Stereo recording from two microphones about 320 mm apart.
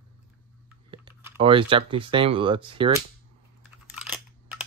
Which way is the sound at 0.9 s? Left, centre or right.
Centre.